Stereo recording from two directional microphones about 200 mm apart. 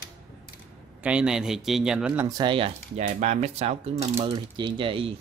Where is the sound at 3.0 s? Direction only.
40° right (ahead or behind).